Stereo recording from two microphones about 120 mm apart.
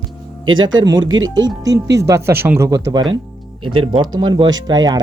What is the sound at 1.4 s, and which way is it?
Speech, 30° right (ahead or behind).